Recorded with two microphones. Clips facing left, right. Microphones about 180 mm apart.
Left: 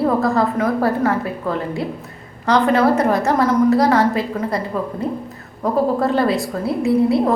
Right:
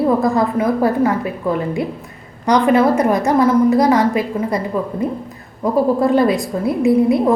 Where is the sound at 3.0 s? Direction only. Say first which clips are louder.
Right 2 dB; 15° right (ahead or behind).